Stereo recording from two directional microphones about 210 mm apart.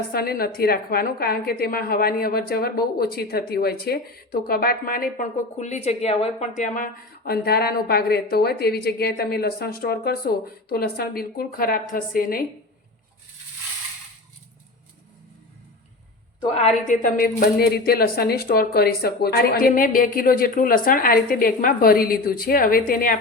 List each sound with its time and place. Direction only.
0.1 s a woman's voice: 45° left (ahead or behind)
16.4 s a woman's voice: 25° left (ahead or behind)